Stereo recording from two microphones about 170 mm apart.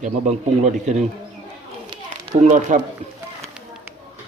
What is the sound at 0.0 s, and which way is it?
A man's voice, 40° right (ahead or behind).